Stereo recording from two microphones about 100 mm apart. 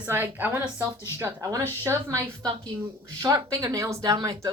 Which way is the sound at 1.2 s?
30° right (ahead or behind).